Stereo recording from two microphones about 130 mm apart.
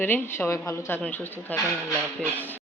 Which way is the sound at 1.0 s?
10° left (ahead or behind).